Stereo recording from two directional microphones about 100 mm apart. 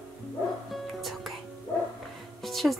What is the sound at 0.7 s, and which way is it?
Music, centre (ahead or behind).